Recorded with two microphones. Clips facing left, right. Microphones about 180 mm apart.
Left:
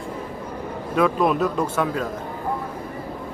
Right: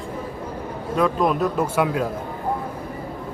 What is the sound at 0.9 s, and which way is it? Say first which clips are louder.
Speech: left 1 dB; 5° left (ahead or behind).